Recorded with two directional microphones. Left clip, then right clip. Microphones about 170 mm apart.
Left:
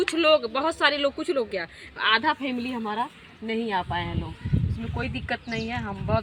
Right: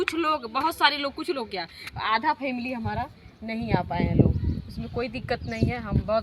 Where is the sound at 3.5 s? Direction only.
30° right (ahead or behind).